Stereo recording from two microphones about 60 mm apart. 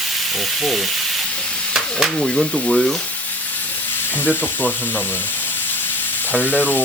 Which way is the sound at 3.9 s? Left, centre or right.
Left.